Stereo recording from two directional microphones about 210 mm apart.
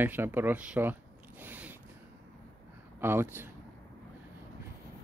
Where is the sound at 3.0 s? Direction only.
10° right (ahead or behind).